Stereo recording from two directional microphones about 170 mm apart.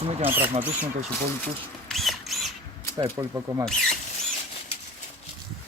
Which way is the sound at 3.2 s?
15° right (ahead or behind).